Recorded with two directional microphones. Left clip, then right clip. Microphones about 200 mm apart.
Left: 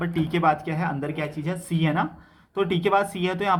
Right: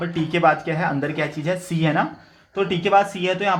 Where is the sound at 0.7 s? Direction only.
25° right (ahead or behind).